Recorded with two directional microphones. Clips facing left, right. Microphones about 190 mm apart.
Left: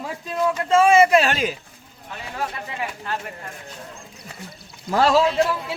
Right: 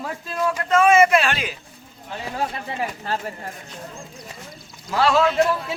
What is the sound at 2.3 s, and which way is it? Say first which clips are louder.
Speech: right 2 dB; 35° right (ahead or behind).